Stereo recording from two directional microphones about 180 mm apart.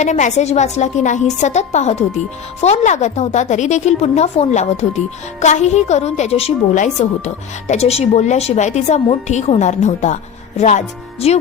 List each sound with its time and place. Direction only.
0.0 s a woman's voice: 40° left (ahead or behind)